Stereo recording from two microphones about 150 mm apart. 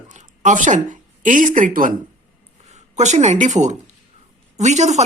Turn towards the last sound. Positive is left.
turn(degrees=-50)  # may be behind; listen again after turning